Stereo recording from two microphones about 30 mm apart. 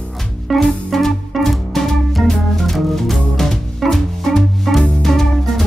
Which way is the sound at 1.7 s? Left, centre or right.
Centre.